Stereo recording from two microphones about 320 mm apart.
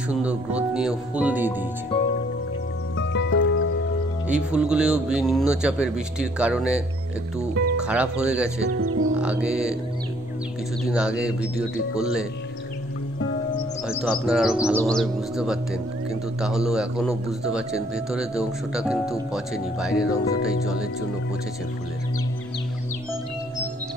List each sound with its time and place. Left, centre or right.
0.1 s speech: centre
3.0 s music: left
4.3 s speech: centre
8.6 s speech: right
9.2 s music: centre
10.9 s speech: centre
13.8 s speech: centre